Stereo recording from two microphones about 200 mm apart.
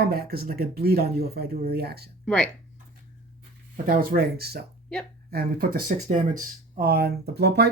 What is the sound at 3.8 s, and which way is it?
Speech, 45° right (ahead or behind).